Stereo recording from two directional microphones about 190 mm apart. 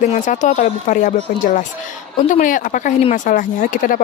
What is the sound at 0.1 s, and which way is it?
Speech, 40° left (ahead or behind).